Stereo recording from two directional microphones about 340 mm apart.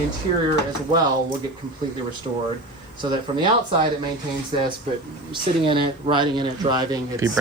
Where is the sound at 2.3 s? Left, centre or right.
Centre.